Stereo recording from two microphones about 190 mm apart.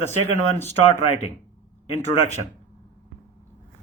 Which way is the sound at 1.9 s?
35° left (ahead or behind).